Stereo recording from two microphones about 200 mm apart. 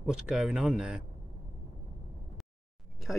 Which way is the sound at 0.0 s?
5° right (ahead or behind).